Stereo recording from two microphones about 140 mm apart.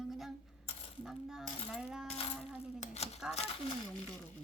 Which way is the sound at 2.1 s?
45° left (ahead or behind).